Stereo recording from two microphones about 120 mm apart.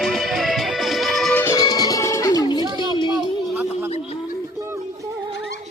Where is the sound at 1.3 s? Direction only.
25° left (ahead or behind).